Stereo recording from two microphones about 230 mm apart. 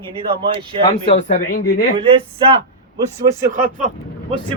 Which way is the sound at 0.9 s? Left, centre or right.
Left.